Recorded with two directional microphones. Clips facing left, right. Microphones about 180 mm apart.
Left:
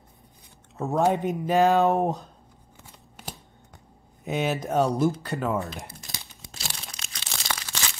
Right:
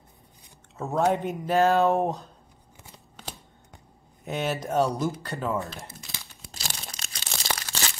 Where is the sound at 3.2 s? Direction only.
10° left (ahead or behind).